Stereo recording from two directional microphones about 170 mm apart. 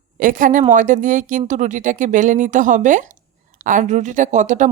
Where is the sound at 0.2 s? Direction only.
50° right (ahead or behind).